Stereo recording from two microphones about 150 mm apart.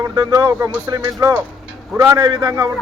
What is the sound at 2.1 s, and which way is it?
Speech, 25° right (ahead or behind).